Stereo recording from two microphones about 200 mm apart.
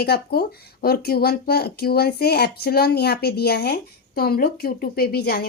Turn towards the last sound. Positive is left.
turn(degrees=50)  # may be behind; listen again after turning